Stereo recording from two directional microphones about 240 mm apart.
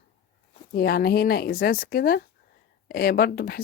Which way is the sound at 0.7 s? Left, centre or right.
Left.